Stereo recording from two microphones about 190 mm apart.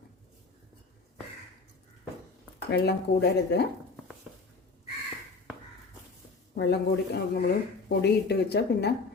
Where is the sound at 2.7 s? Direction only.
60° left (ahead or behind).